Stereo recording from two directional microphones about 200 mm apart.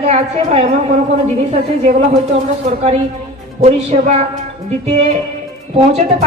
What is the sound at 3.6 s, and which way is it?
Speech, 35° right (ahead or behind).